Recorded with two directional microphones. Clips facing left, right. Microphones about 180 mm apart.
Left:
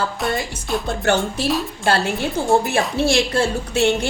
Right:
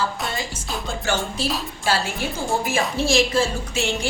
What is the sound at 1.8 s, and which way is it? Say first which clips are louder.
A woman's voice: left 4 dB; 60° left (ahead or behind).